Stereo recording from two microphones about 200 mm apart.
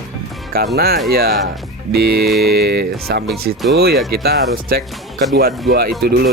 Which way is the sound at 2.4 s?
50° right (ahead or behind).